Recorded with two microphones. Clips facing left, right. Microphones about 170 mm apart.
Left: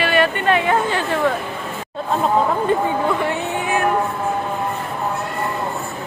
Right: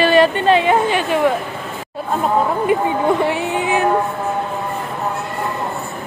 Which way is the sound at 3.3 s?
15° right (ahead or behind).